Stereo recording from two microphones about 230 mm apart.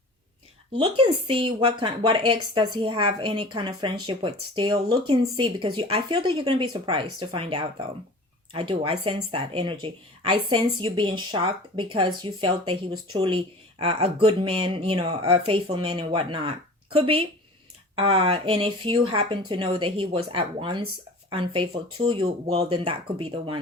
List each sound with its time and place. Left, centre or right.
0.8 s speech: right